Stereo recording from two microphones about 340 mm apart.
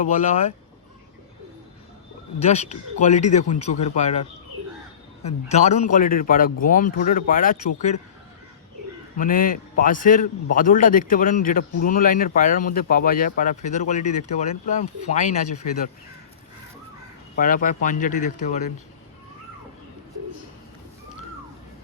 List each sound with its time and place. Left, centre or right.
0.0 s a man's voice: left
2.4 s a man's voice: centre
9.1 s a man's voice: left
17.3 s a man's voice: left